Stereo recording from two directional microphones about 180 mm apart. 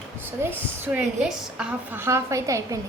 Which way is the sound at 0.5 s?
5° right (ahead or behind).